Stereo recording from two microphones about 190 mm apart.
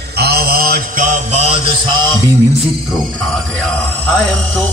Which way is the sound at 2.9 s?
Centre (ahead or behind).